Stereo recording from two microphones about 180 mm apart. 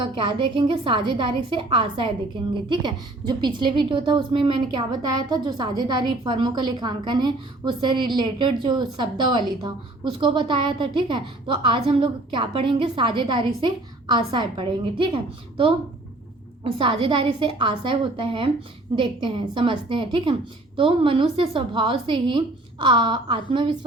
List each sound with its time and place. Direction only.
0.2 s a woman's voice: 25° right (ahead or behind)